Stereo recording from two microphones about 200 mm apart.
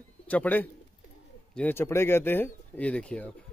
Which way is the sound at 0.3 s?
10° left (ahead or behind).